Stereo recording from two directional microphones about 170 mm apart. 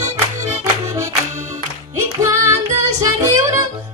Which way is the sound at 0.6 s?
15° right (ahead or behind).